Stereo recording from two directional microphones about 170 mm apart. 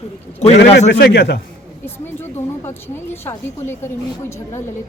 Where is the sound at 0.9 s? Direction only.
80° left.